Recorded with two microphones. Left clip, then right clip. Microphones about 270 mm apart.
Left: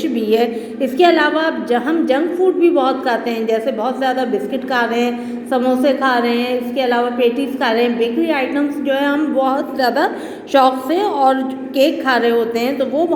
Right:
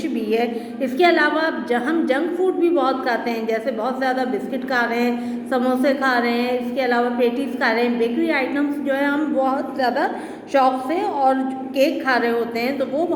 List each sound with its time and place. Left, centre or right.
0.3 s a woman's voice: centre